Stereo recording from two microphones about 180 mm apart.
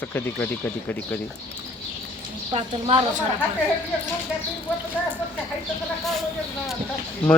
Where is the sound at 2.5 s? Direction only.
35° right (ahead or behind).